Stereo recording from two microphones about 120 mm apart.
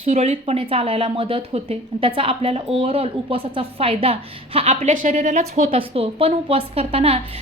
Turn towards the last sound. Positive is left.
turn(degrees=-55)  # may be behind; listen again after turning